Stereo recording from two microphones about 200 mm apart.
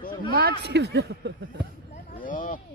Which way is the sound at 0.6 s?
55° right (ahead or behind).